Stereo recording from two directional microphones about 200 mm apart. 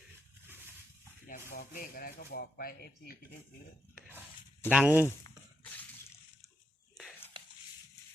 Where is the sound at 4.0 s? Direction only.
10° right (ahead or behind).